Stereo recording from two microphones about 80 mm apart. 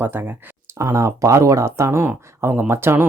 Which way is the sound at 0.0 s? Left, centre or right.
Right.